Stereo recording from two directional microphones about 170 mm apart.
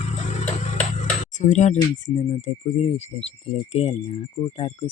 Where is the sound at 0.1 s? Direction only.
45° left (ahead or behind).